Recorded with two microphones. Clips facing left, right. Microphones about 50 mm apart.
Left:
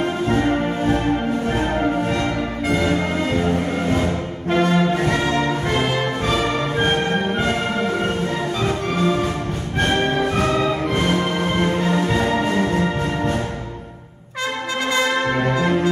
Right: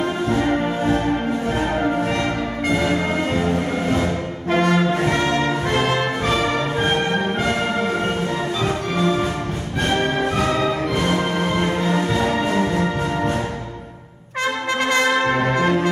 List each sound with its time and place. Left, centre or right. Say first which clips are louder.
0.0 s music: left 1 dB; left
4.5 s music: even; right
8.6 s music: left 1 dB; centre
11.1 s music: even; centre
14.9 s brass instrument: right 1 dB; right